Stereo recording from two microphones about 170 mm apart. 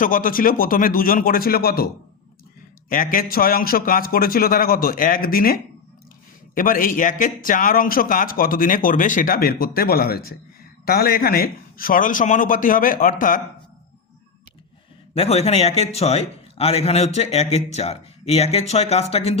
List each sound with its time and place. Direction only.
0.0 s a man's voice: 55° left (ahead or behind)
2.9 s a man's voice: 55° left (ahead or behind)
15.1 s a man's voice: 35° left (ahead or behind)